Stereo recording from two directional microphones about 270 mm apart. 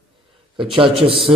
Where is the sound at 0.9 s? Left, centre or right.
Centre.